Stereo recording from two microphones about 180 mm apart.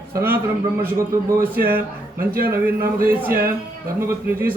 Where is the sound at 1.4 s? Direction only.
55° right (ahead or behind).